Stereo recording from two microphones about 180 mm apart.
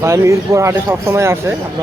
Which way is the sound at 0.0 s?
15° right (ahead or behind).